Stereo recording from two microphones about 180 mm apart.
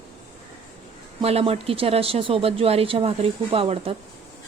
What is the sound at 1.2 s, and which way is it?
Speech, 35° right (ahead or behind).